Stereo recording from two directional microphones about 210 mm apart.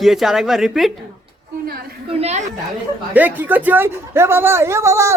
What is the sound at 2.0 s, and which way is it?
Speech, 30° right (ahead or behind).